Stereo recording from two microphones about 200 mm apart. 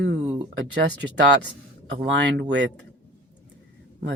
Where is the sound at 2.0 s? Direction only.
60° right (ahead or behind).